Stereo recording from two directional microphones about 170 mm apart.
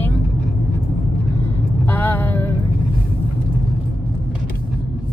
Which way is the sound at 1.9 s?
10° left (ahead or behind).